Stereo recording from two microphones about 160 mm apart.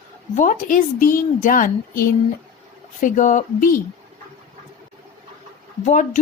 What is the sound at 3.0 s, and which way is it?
Speech, 55° left (ahead or behind).